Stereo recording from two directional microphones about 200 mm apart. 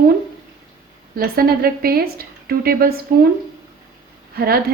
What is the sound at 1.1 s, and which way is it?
A woman's voice, 45° right (ahead or behind).